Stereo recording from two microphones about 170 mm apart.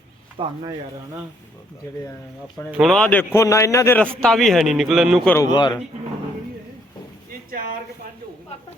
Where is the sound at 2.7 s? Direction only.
Centre (ahead or behind).